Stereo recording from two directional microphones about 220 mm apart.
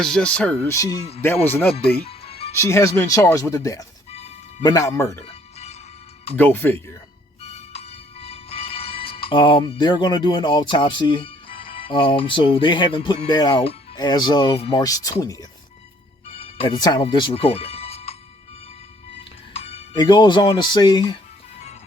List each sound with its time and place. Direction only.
0.0 s speech: 5° left (ahead or behind)
1.7 s music: 25° left (ahead or behind)
2.5 s speech: 15° left (ahead or behind)
5.2 s music: 30° left (ahead or behind)
6.3 s speech: 10° left (ahead or behind)
7.4 s music: 30° left (ahead or behind)
9.3 s speech: 20° left (ahead or behind)
19.5 s speech: 30° left (ahead or behind)